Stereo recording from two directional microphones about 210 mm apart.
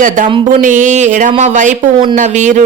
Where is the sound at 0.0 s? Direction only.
35° right (ahead or behind).